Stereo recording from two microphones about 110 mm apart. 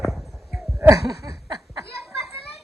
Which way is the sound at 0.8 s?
25° right (ahead or behind).